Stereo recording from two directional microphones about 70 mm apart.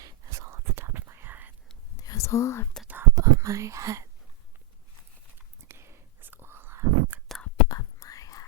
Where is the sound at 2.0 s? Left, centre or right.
Left.